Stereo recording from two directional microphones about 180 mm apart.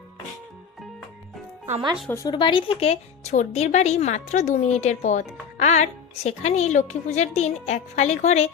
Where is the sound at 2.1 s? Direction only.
20° left (ahead or behind).